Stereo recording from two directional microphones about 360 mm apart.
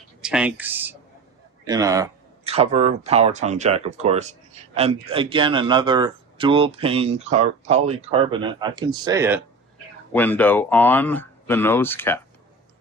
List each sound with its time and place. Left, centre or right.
0.2 s speech: centre
10.1 s speech: centre